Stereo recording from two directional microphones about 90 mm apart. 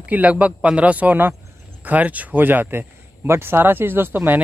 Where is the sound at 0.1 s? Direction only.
15° right (ahead or behind).